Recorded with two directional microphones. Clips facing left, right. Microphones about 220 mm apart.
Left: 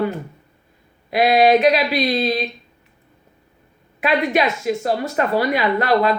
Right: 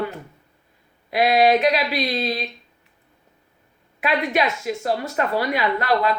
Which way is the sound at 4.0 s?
20° left (ahead or behind).